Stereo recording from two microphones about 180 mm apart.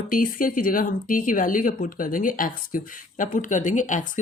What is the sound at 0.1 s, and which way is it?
Speech, 50° left (ahead or behind).